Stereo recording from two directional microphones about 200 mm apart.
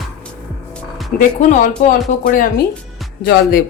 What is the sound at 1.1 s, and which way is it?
Speech, 40° left (ahead or behind).